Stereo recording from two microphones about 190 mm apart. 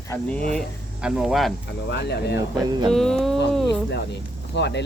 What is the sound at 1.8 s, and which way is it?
Speech, 60° left (ahead or behind).